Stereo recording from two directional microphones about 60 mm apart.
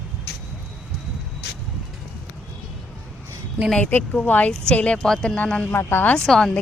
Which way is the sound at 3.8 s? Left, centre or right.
Left.